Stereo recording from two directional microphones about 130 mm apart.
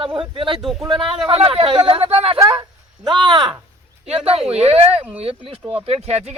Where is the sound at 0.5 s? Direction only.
Centre (ahead or behind).